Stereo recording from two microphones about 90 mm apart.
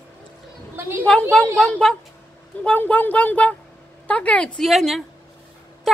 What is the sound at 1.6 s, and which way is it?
Speech, 10° left (ahead or behind).